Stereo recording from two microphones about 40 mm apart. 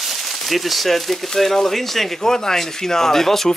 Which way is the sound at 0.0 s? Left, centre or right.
Centre.